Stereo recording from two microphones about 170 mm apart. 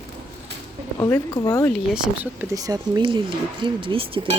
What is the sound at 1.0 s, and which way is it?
Speech, 20° left (ahead or behind).